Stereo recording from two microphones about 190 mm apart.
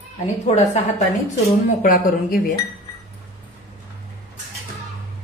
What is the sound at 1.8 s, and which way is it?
Speech, 45° left (ahead or behind).